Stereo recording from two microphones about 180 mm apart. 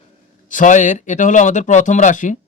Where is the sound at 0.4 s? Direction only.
45° left (ahead or behind).